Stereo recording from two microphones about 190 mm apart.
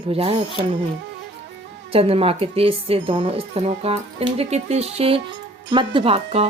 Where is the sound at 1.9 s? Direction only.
30° right (ahead or behind).